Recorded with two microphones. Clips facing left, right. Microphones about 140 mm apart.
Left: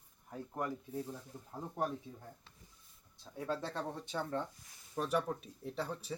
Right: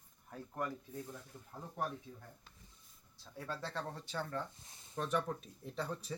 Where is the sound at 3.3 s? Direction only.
20° left (ahead or behind).